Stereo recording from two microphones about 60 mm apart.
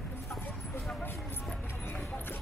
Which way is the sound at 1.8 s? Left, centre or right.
Left.